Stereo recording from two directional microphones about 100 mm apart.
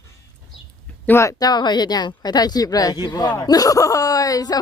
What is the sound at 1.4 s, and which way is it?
A woman's voice, 45° left (ahead or behind).